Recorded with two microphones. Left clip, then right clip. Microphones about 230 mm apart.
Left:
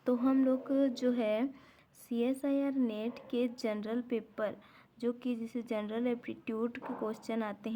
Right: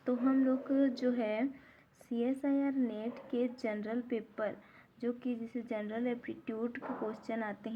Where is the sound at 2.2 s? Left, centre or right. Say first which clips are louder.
Left 1 dB; left.